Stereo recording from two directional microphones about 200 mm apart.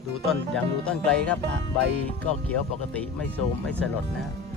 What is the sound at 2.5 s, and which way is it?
Speech, 5° left (ahead or behind).